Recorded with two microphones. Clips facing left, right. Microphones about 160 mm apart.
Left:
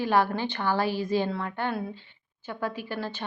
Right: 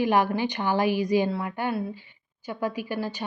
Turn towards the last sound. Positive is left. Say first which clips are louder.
# right 3 dB
turn(degrees=-10)  # may be behind; listen again after turning